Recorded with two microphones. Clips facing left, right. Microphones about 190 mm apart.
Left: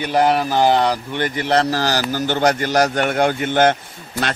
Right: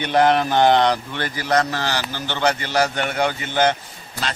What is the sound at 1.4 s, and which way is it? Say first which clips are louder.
A man's voice: left 2 dB; 35° left (ahead or behind).